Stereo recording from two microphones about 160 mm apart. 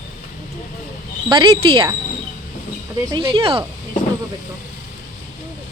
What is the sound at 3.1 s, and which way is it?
Speech, 30° right (ahead or behind).